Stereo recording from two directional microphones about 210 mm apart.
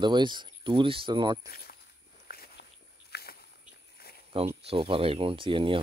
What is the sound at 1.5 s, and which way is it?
Walk, 45° left (ahead or behind).